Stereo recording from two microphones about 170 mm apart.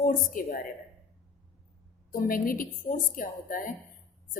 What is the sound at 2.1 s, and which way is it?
Speech, 55° left (ahead or behind).